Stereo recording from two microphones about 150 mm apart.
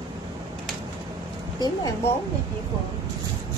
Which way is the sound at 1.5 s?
30° left (ahead or behind).